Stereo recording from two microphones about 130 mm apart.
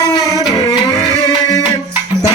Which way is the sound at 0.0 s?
30° left (ahead or behind).